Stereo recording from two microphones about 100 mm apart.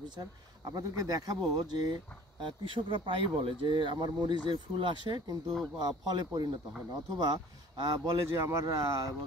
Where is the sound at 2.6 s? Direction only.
60° right (ahead or behind).